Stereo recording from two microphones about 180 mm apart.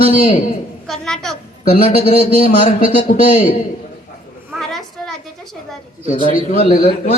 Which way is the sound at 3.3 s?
35° left (ahead or behind).